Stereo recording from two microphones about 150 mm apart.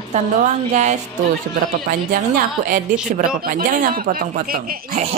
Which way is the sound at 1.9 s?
70° right (ahead or behind).